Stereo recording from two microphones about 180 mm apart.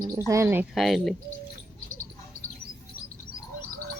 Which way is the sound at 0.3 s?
15° right (ahead or behind).